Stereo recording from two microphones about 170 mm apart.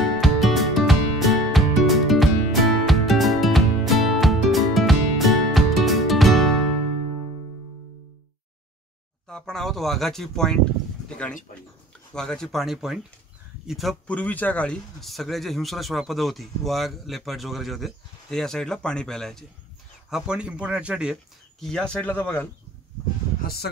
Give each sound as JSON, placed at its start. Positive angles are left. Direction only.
{"t": 0.0, "sound": "music", "side_deg": 0}
{"t": 9.3, "sound": "speech", "side_deg": 0}
{"t": 12.1, "sound": "speech", "side_deg": 5}
{"t": 23.4, "sound": "speech", "side_deg": 65}